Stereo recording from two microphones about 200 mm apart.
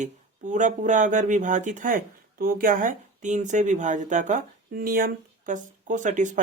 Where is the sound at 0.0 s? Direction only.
40° right (ahead or behind).